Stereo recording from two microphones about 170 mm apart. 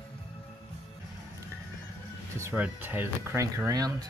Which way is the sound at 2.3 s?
15° right (ahead or behind).